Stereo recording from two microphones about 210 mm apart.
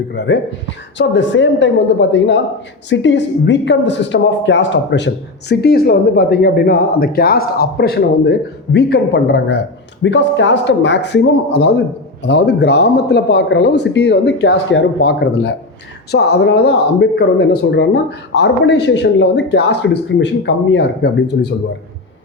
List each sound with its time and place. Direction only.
0.1 s speech: 55° left (ahead or behind)